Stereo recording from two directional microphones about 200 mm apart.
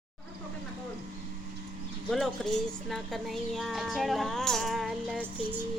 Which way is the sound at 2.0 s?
Centre (ahead or behind).